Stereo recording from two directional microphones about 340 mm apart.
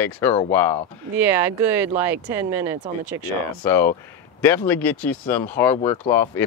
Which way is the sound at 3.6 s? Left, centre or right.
Centre.